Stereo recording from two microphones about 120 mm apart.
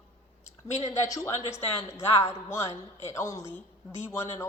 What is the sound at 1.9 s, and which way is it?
A woman's voice, 20° left (ahead or behind).